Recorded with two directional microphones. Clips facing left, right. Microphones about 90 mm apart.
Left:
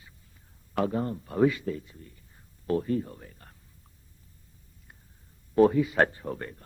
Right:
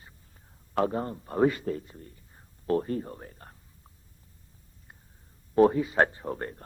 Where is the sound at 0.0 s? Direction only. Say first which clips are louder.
Right 2 dB; 40° right (ahead or behind).